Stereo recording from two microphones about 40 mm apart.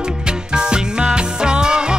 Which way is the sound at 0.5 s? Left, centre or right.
Right.